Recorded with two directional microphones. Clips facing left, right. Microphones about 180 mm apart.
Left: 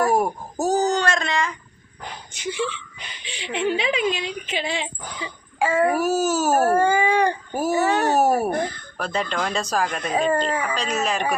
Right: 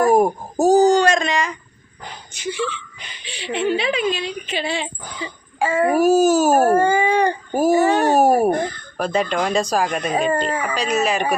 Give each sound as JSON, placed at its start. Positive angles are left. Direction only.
{"t": 0.0, "sound": "a sound", "side_deg": -15}
{"t": 0.6, "sound": "speech", "side_deg": -15}
{"t": 3.2, "sound": "speech", "side_deg": 20}
{"t": 5.6, "sound": "speech", "side_deg": -10}
{"t": 6.7, "sound": "speech", "side_deg": 5}
{"t": 7.5, "sound": "speech", "side_deg": -15}